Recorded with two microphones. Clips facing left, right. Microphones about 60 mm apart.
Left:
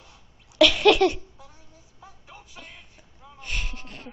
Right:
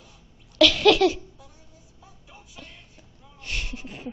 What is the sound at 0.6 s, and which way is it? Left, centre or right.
Laughter, centre.